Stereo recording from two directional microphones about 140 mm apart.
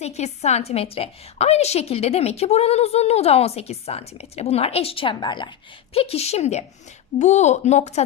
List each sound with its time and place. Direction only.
0.0 s a woman's voice: 50° left (ahead or behind)